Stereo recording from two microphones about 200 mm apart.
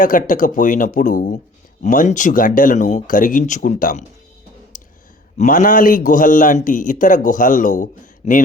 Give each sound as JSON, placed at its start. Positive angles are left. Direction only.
{"t": 0.0, "sound": "speech", "side_deg": 40}
{"t": 4.7, "sound": "clicking", "side_deg": 40}
{"t": 5.4, "sound": "speech", "side_deg": 40}